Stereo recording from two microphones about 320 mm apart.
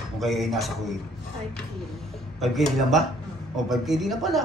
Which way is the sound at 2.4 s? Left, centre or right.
Centre.